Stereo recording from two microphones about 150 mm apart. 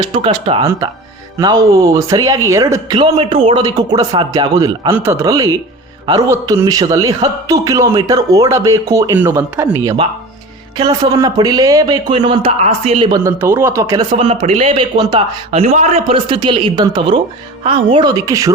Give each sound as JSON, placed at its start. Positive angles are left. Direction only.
{"t": 0.0, "sound": "speech", "side_deg": -35}
{"t": 1.5, "sound": "a man's voice", "side_deg": -20}
{"t": 3.0, "sound": "a man's voice", "side_deg": -35}
{"t": 13.1, "sound": "a man's voice", "side_deg": -20}
{"t": 14.0, "sound": "speech", "side_deg": -40}
{"t": 15.5, "sound": "a man's voice", "side_deg": -45}